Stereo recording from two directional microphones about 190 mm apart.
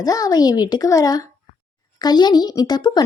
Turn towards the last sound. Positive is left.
turn(degrees=20)  # may be behind; listen again after turning